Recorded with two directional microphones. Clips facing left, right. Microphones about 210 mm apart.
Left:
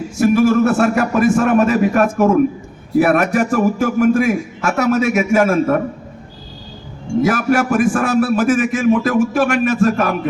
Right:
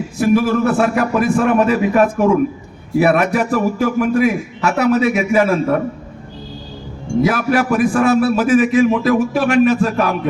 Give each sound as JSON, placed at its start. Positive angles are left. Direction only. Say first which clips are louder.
{"t": 0.2, "sound": "a man's voice", "louder": "left 2 dB", "side_deg": 45}
{"t": 7.2, "sound": "a man's voice", "louder": "even", "side_deg": 50}